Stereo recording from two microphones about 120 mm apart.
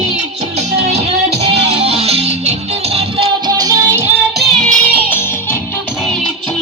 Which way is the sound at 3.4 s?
35° right (ahead or behind).